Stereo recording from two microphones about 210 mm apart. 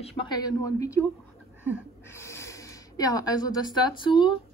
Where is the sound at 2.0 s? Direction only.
10° left (ahead or behind).